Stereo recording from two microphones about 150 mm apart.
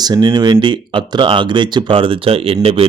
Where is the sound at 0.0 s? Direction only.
30° right (ahead or behind).